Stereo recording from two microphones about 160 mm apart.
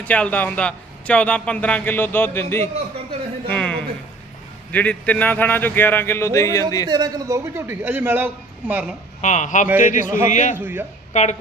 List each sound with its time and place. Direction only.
0.0 s a man's voice: 10° left (ahead or behind)
6.8 s a man's voice: 25° right (ahead or behind); by 9.0 s 5° right (ahead or behind)
9.2 s speech: 50° left (ahead or behind)
10.6 s a man's voice: 10° right (ahead or behind)
11.1 s speech: 45° left (ahead or behind)